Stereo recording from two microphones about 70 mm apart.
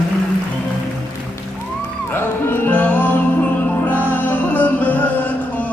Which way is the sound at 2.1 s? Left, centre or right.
Left.